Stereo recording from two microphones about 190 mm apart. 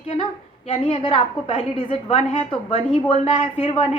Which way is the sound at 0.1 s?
30° left (ahead or behind).